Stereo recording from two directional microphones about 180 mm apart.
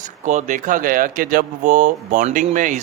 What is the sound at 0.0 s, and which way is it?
Speech, 45° right (ahead or behind).